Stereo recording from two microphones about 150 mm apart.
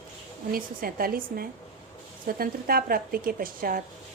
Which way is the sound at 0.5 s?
75° right (ahead or behind).